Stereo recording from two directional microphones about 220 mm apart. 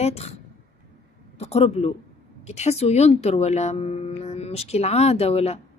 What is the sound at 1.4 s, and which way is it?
Speech, 25° left (ahead or behind).